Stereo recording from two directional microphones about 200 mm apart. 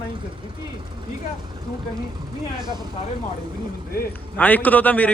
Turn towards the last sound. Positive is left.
turn(degrees=10)  # may be behind; listen again after turning